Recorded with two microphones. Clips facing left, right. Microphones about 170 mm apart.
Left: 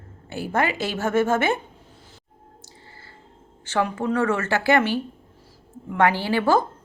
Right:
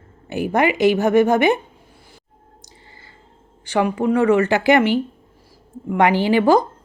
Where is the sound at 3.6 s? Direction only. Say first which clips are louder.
Right 5 dB; 15° right (ahead or behind).